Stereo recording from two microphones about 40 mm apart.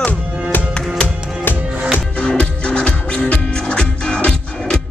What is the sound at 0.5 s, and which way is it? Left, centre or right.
Music, left.